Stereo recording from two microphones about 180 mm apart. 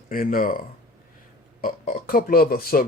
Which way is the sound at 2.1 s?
55° left (ahead or behind).